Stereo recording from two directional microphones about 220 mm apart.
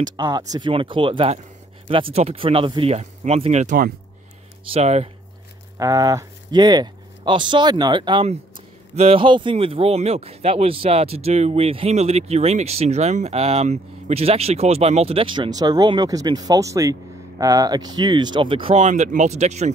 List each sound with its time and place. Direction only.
0.2 s speech: 15° right (ahead or behind)
5.8 s speech: 15° right (ahead or behind); by 19.7 s 30° right (ahead or behind)